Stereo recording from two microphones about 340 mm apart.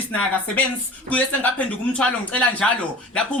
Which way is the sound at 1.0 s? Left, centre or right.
Centre.